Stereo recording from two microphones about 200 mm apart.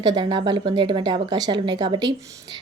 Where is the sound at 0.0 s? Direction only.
20° right (ahead or behind).